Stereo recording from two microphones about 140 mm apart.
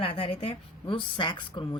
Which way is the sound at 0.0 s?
40° left (ahead or behind).